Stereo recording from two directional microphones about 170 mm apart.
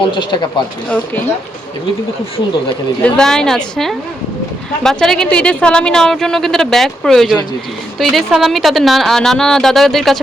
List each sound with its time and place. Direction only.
0.1 s speech: 25° left (ahead or behind)
3.0 s speech: 5° left (ahead or behind)